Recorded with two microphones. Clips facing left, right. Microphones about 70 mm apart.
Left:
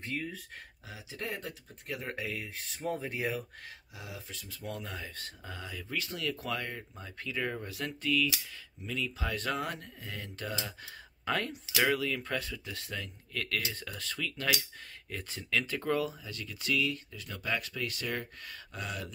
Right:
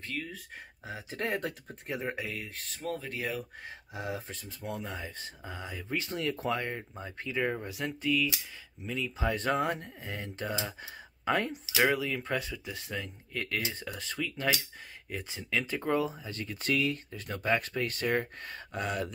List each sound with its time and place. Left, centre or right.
0.8 s speech: right
1.2 s speech: right
2.2 s speech: centre
3.9 s speech: right; by 11.6 s centre
11.6 s speech: centre
11.9 s speech: centre; by 19.1 s right